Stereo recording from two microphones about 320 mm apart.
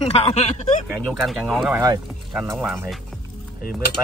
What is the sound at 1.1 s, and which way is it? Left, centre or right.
Speech, centre.